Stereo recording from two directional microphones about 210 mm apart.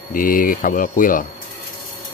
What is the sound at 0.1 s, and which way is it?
Speech, 40° left (ahead or behind).